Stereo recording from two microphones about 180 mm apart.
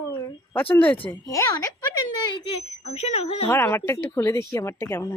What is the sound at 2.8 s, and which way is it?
Speech, 35° left (ahead or behind).